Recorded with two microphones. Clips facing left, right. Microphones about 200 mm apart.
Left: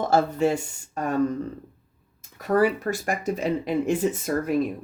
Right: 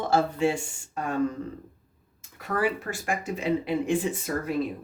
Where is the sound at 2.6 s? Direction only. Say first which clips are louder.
Left 6 dB; 40° left (ahead or behind).